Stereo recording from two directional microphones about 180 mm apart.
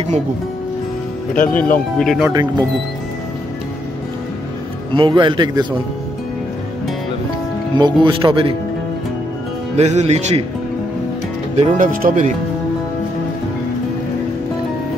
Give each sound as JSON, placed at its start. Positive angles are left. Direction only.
{"t": 1.3, "sound": "speech", "side_deg": 45}
{"t": 2.0, "sound": "speech", "side_deg": 0}
{"t": 4.9, "sound": "speech", "side_deg": -25}
{"t": 7.7, "sound": "speech", "side_deg": -25}
{"t": 9.8, "sound": "speech", "side_deg": -40}
{"t": 11.5, "sound": "speech", "side_deg": -45}